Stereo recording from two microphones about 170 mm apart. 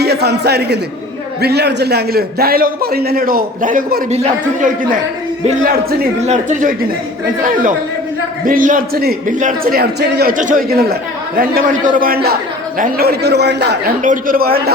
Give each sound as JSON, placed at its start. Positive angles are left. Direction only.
{"t": 0.0, "sound": "a man's voice", "side_deg": -70}
{"t": 4.1, "sound": "speech", "side_deg": -45}
{"t": 6.2, "sound": "speech", "side_deg": -45}
{"t": 8.4, "sound": "a man's voice", "side_deg": -55}
{"t": 10.3, "sound": "a man's voice", "side_deg": -50}
{"t": 14.0, "sound": "a man's voice", "side_deg": -50}